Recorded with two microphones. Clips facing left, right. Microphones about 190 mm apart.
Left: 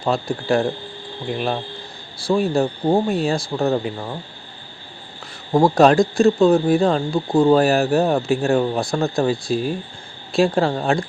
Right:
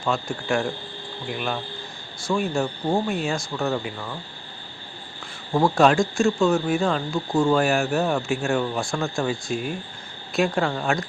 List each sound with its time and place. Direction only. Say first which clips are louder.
0.0 s speech: left 4 dB; 35° left (ahead or behind)
5.5 s speech: left 5 dB; 40° left (ahead or behind)